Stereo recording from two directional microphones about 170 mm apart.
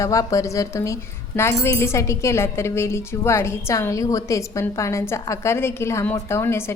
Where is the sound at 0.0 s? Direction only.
20° left (ahead or behind).